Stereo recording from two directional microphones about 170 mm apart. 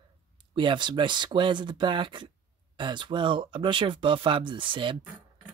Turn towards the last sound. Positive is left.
turn(degrees=-30)  # may be behind; listen again after turning